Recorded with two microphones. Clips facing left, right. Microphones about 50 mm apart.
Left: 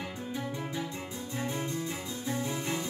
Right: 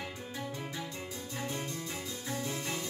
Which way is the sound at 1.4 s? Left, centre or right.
Centre.